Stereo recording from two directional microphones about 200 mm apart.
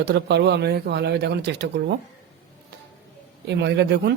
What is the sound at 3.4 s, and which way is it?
Speech, 60° right (ahead or behind).